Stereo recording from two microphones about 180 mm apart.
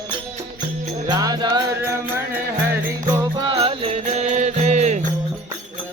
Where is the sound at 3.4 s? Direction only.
30° right (ahead or behind).